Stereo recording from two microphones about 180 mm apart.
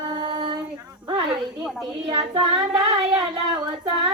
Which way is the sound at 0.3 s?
30° right (ahead or behind).